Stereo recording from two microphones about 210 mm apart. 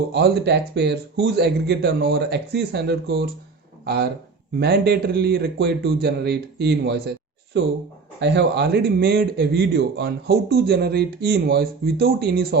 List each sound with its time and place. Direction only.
0.1 s a man's voice: 50° right (ahead or behind)